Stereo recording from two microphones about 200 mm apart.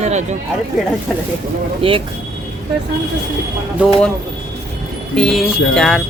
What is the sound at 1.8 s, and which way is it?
Speech, 25° right (ahead or behind).